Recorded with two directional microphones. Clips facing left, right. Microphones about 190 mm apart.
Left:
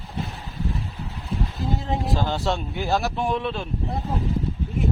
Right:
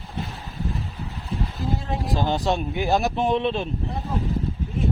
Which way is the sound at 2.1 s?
20° right (ahead or behind).